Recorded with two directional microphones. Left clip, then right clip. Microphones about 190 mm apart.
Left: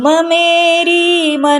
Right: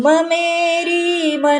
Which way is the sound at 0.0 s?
35° left (ahead or behind).